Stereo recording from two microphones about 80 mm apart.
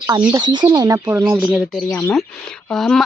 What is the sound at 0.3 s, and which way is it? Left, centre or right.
Speech, right.